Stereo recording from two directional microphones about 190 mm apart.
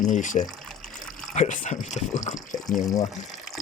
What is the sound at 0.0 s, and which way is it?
Speech, 40° left (ahead or behind).